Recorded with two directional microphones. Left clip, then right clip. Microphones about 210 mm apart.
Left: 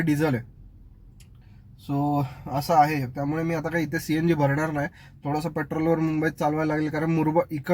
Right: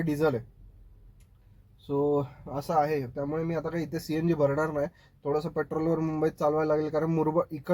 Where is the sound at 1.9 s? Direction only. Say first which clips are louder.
Even; 20° left (ahead or behind).